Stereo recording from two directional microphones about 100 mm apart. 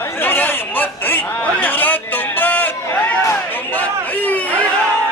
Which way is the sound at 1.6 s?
20° left (ahead or behind).